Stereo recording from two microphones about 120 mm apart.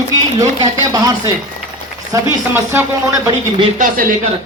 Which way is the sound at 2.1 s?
30° right (ahead or behind).